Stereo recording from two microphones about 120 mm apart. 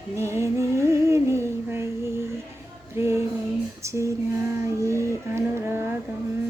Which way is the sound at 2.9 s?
20° right (ahead or behind).